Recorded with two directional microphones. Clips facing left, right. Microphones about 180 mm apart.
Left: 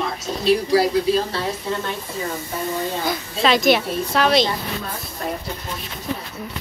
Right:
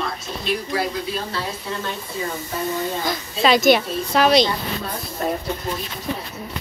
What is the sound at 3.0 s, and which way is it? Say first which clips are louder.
A woman's voice: right 1 dB; centre (ahead or behind).